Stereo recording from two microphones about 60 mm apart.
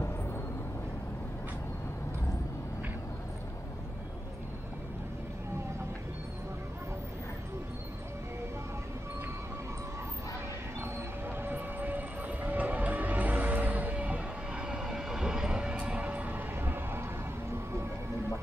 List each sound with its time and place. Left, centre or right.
10.8 s train: right; by 15.7 s centre
15.7 s music: right